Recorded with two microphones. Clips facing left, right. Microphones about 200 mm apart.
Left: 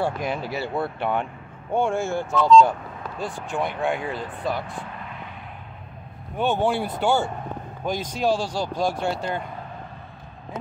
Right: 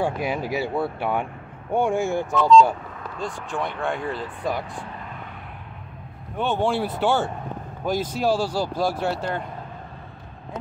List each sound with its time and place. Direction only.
0.0 s speech: 10° right (ahead or behind)
3.2 s speech: 5° left (ahead or behind)
4.4 s speech: 15° right (ahead or behind)
6.3 s speech: 5° left (ahead or behind)